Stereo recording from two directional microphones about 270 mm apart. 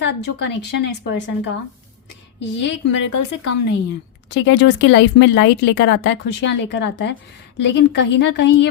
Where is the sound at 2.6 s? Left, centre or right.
Left.